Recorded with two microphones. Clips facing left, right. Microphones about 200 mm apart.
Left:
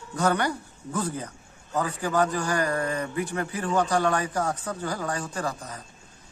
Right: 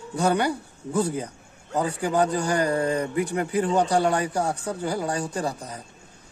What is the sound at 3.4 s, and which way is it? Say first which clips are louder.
Speech: right 3 dB; 15° right (ahead or behind).